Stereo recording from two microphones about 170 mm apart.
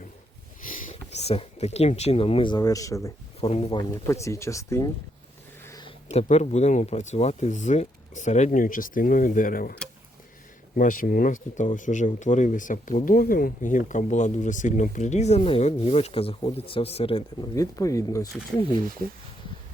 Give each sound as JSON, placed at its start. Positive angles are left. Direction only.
{"t": 0.7, "sound": "speech", "side_deg": 40}
{"t": 3.4, "sound": "speech", "side_deg": 35}
{"t": 3.9, "sound": "speech", "side_deg": 15}
{"t": 5.6, "sound": "a sound", "side_deg": 20}
{"t": 6.1, "sound": "speech", "side_deg": 40}
{"t": 10.8, "sound": "speech", "side_deg": 55}
{"t": 17.5, "sound": "speech", "side_deg": 20}